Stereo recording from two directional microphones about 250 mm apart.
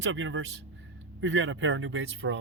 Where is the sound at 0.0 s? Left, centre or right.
Right.